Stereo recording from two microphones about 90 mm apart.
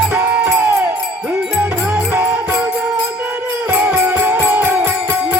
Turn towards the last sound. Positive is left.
turn(degrees=-20)  # may be behind; listen again after turning